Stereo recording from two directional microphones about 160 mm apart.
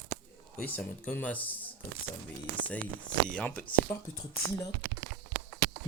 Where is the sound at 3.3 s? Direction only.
10° left (ahead or behind).